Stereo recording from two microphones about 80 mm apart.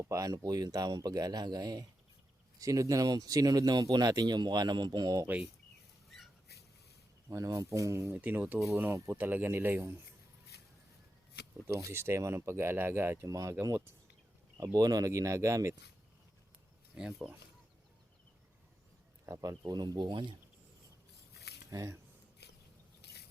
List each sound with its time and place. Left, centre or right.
0.0 s a man's voice: right
5.2 s speech: centre
7.3 s speech: right
8.1 s speech: right
11.7 s speech: right
13.2 s speech: right
14.6 s a man's voice: right
16.9 s speech: centre
19.3 s speech: right
21.7 s speech: right